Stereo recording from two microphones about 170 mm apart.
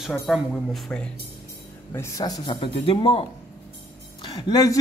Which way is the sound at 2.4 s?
30° left (ahead or behind).